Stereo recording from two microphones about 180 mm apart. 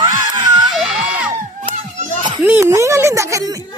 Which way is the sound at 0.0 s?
25° right (ahead or behind).